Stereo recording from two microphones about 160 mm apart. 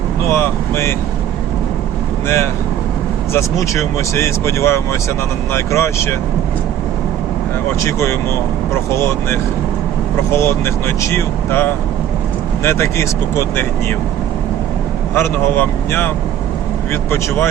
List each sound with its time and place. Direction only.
0.3 s vehicle: 15° left (ahead or behind)
2.2 s speech: 15° left (ahead or behind)
7.8 s speech: 15° left (ahead or behind)
15.1 s speech: 15° left (ahead or behind)